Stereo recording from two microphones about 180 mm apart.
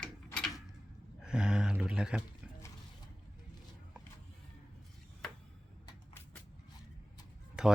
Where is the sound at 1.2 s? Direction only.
5° right (ahead or behind).